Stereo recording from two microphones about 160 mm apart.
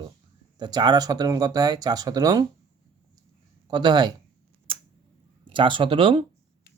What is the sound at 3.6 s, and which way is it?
Speech, 25° right (ahead or behind).